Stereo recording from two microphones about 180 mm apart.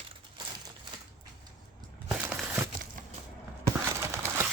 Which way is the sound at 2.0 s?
10° right (ahead or behind).